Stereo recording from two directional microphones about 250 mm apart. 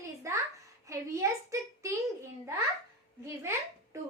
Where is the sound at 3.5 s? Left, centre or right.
Centre.